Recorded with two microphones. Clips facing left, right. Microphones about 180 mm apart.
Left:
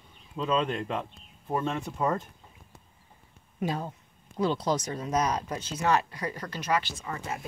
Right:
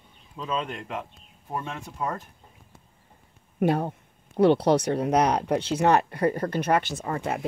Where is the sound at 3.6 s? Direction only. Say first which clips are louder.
Right 8 dB; 60° right (ahead or behind).